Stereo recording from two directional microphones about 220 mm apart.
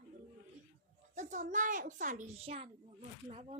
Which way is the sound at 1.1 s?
35° right (ahead or behind).